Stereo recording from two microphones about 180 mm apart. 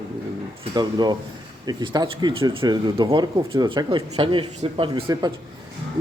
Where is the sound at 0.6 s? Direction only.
25° right (ahead or behind).